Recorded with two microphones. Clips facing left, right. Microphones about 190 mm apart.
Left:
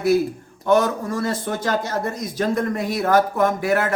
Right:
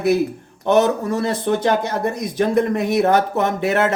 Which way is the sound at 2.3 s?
20° right (ahead or behind).